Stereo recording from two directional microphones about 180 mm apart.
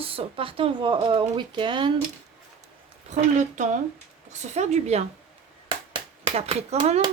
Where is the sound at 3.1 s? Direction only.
40° right (ahead or behind).